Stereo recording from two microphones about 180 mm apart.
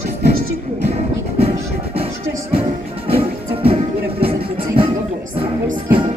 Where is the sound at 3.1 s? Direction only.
30° right (ahead or behind).